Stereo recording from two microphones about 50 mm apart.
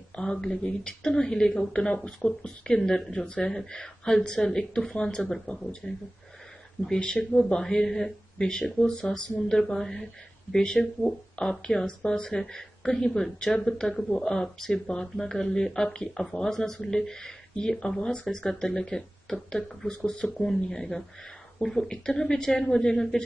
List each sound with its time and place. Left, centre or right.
0.1 s speech: centre